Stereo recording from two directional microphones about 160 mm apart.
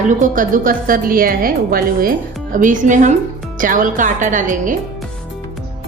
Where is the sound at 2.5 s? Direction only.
55° right (ahead or behind).